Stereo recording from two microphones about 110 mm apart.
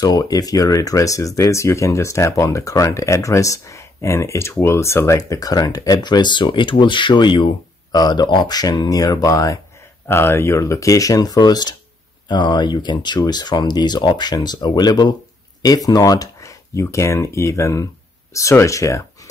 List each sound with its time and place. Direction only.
0.0 s speech: 35° left (ahead or behind)